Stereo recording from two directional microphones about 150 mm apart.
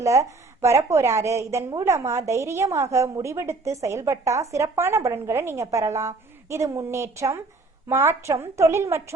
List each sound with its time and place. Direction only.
0.0 s a woman's voice: 20° right (ahead or behind)